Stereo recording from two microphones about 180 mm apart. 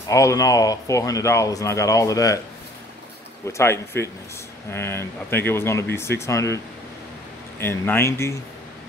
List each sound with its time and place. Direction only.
0.1 s speech: 20° left (ahead or behind)
3.5 s speech: 15° left (ahead or behind)